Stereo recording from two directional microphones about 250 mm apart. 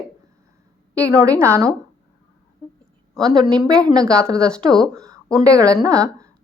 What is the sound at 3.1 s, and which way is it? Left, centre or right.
Speech, centre.